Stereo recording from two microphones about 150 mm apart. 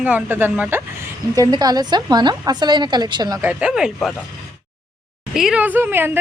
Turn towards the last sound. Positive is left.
turn(degrees=-15)  # may be behind; listen again after turning